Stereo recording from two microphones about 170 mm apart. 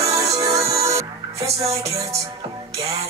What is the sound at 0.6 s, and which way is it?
Music, 35° right (ahead or behind).